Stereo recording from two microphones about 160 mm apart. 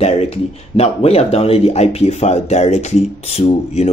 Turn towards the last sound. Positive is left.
turn(degrees=40)  # may be behind; listen again after turning